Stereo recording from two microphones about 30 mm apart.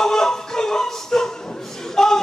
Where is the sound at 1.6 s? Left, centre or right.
Centre.